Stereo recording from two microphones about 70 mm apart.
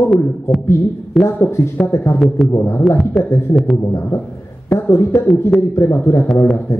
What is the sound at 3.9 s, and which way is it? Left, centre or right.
Speech, left.